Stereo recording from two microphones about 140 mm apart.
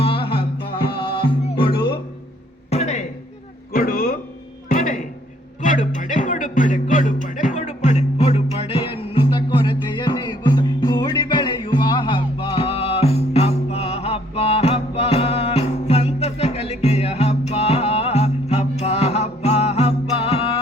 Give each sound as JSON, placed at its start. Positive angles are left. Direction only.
{"t": 0.0, "sound": "music", "side_deg": 40}
{"t": 2.6, "sound": "music", "side_deg": 50}
{"t": 3.7, "sound": "a sound", "side_deg": 90}
{"t": 4.7, "sound": "music", "side_deg": 75}